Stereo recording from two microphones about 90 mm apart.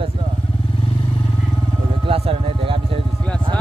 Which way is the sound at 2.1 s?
90° right.